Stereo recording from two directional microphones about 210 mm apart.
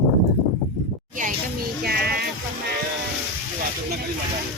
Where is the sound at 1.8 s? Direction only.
45° right (ahead or behind).